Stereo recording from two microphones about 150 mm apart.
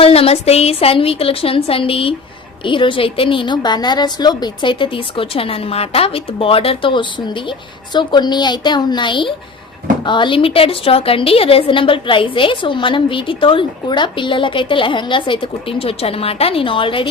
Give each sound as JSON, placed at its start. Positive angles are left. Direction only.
{"t": 0.0, "sound": "a woman's voice", "side_deg": 40}